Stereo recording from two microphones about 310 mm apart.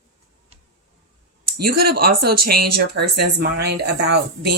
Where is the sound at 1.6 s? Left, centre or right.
Right.